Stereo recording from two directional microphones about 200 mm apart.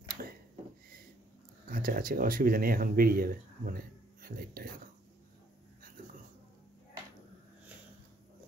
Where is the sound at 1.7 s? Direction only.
45° right (ahead or behind).